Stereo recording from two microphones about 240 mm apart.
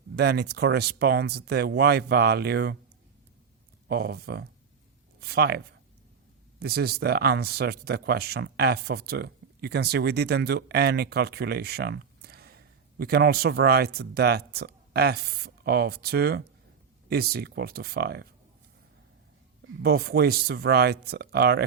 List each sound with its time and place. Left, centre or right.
0.2 s speech: right
3.8 s speech: right
19.8 s speech: right